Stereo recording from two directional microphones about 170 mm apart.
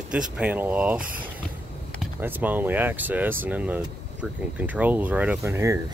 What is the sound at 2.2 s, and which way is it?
Speech, 10° right (ahead or behind).